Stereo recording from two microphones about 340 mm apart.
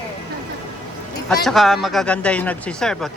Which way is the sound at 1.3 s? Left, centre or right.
Centre.